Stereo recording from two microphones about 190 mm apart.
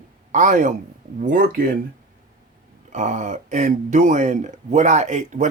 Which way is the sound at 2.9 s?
40° right (ahead or behind).